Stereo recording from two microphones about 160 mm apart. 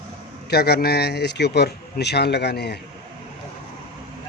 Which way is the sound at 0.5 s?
80° left.